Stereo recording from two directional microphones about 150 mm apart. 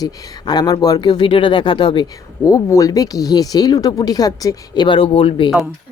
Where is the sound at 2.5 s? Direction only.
20° left (ahead or behind); by 5.5 s 40° left (ahead or behind).